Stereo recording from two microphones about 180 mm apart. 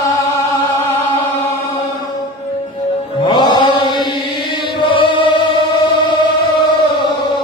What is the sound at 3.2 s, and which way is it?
Chant, 25° left (ahead or behind).